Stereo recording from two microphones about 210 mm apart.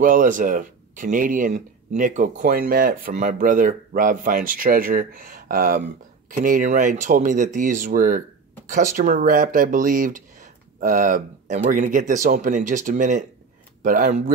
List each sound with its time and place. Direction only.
0.0 s speech: 40° right (ahead or behind)